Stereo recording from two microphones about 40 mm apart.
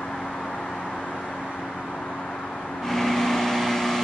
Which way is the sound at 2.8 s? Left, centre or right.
Centre.